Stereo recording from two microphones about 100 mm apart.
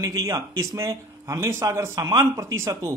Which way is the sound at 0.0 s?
35° right (ahead or behind).